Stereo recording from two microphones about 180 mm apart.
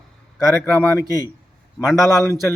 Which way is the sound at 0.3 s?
15° left (ahead or behind).